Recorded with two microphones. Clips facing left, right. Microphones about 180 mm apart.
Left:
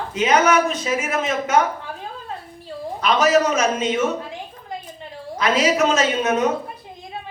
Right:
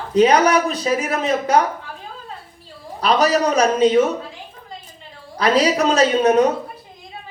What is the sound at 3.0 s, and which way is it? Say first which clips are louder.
A man's voice: even; 35° right (ahead or behind).